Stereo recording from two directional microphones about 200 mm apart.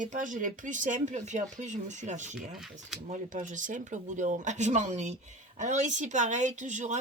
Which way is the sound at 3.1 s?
40° right (ahead or behind).